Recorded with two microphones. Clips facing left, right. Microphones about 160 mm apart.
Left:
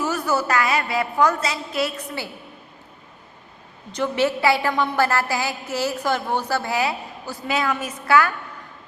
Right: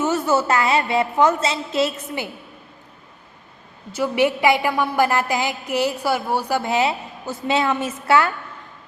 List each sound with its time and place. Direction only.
0.0 s a woman's voice: 25° right (ahead or behind)
3.9 s a woman's voice: 10° right (ahead or behind); by 8.3 s 25° right (ahead or behind)